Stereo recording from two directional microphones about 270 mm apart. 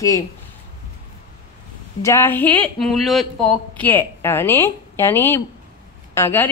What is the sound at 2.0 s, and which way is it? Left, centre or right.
Speech, centre.